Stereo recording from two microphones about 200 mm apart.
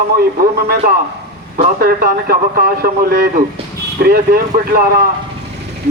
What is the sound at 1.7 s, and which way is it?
Speech, 50° right (ahead or behind).